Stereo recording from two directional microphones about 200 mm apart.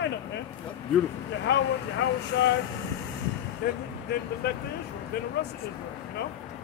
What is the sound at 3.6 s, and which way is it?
Speech, 50° left (ahead or behind).